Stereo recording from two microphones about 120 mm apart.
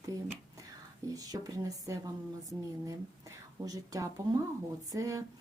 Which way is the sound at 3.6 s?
30° right (ahead or behind).